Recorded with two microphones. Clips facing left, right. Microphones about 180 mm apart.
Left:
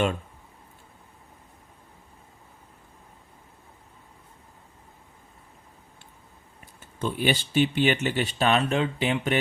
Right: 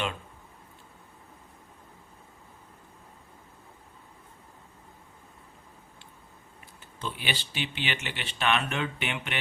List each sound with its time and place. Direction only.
7.0 s speech: 45° left (ahead or behind)